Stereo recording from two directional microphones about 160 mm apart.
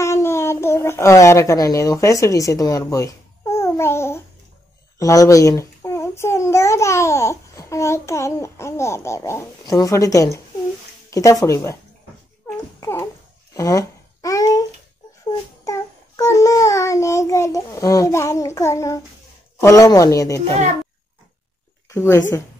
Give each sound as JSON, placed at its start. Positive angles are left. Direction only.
{"t": 0.0, "sound": "a child's voice", "side_deg": 15}
{"t": 12.8, "sound": "speech", "side_deg": 15}
{"t": 13.6, "sound": "babbling", "side_deg": 20}
{"t": 15.6, "sound": "child singing", "side_deg": 20}
{"t": 19.6, "sound": "speech", "side_deg": 20}
{"t": 21.8, "sound": "speech", "side_deg": 15}